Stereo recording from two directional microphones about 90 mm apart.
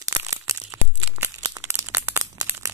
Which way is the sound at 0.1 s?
35° right (ahead or behind).